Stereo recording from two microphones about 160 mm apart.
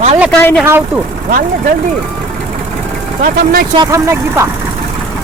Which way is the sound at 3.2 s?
60° right (ahead or behind).